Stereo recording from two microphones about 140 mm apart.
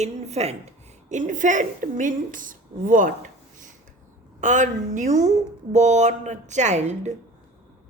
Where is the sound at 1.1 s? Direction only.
65° right (ahead or behind).